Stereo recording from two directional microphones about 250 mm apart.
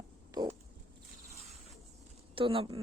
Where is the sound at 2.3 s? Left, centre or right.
Right.